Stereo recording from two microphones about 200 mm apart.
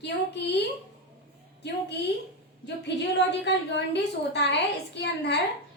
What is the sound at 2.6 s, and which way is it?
A woman's voice, 60° left (ahead or behind).